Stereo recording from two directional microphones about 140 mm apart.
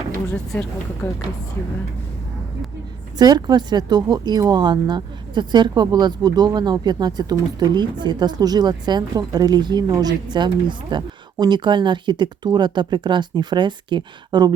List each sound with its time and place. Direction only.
1.0 s speech: 15° left (ahead or behind)
3.2 s speech: 30° right (ahead or behind)